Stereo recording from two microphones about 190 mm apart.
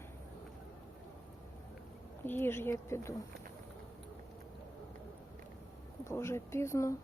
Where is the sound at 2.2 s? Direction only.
10° left (ahead or behind).